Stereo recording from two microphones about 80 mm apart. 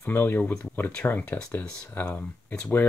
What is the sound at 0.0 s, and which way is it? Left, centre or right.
Speech, left.